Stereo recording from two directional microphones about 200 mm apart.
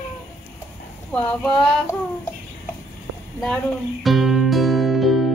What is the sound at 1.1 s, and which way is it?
Female singing, 5° left (ahead or behind).